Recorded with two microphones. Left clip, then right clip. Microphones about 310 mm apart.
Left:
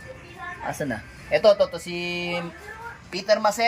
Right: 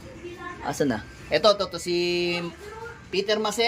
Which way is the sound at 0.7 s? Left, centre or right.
Centre.